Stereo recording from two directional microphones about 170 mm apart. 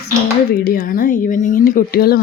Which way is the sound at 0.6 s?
60° left (ahead or behind).